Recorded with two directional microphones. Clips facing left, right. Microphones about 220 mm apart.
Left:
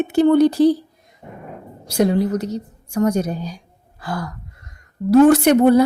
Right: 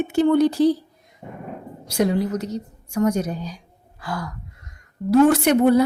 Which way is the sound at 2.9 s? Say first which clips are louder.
Left 2 dB; 35° left (ahead or behind).